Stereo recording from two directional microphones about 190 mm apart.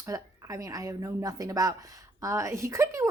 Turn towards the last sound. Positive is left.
turn(degrees=-15)  # may be behind; listen again after turning